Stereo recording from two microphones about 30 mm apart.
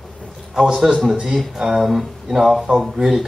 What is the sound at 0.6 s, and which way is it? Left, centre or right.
Speech, centre.